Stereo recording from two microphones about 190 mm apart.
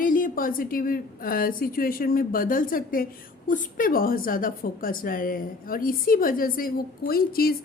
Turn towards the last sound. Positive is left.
turn(degrees=50)  # may be behind; listen again after turning